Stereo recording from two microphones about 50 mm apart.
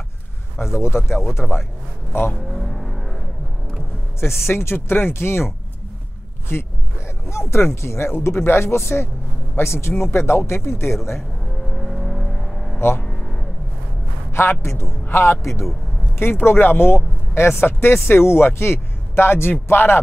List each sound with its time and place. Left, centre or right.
0.6 s speech: left
1.4 s speech: centre
2.6 s vehicle: centre
4.2 s speech: left
6.5 s speech: left
7.2 s speech: left
11.7 s vehicle: centre
13.0 s music: centre
14.3 s speech: left